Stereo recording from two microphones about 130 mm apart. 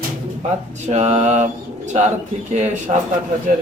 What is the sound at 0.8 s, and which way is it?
Mantra, 60° right (ahead or behind).